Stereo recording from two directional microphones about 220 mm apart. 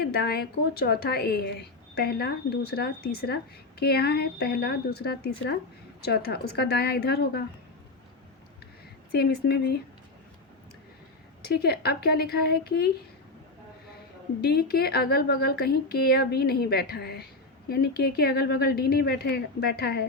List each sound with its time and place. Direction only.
0.0 s a woman's voice: 45° left (ahead or behind)
9.1 s a woman's voice: 45° left (ahead or behind)
11.4 s a woman's voice: 45° left (ahead or behind)
14.4 s a woman's voice: 45° left (ahead or behind)